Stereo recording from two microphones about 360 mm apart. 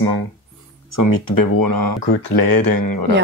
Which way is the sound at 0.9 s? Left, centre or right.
Left.